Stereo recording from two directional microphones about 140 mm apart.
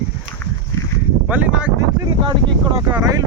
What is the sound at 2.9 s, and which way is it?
Speech, 25° right (ahead or behind).